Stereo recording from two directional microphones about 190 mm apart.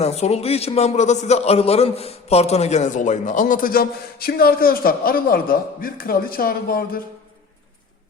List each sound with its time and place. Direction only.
0.0 s a man's voice: 35° left (ahead or behind); by 7.0 s 50° left (ahead or behind)